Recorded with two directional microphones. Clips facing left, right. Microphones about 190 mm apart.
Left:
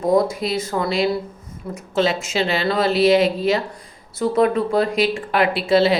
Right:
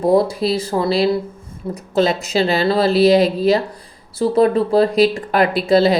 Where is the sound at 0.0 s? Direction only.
30° right (ahead or behind).